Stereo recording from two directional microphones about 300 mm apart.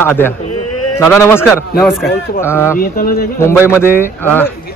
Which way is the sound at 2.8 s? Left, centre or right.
Left.